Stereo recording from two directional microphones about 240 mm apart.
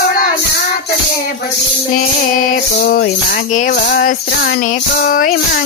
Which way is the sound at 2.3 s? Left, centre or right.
Left.